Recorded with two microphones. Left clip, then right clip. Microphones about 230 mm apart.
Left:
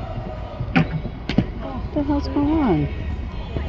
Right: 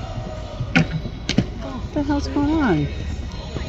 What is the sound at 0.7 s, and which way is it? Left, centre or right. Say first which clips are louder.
Tick-tock: right 2 dB; centre.